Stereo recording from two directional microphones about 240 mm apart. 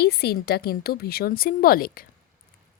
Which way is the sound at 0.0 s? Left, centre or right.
Left.